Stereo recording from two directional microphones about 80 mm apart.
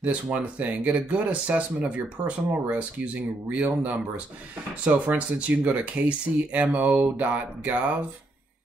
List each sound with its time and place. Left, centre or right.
0.0 s speech: centre